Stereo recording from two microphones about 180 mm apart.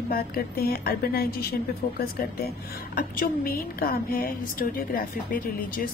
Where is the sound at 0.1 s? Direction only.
55° left (ahead or behind).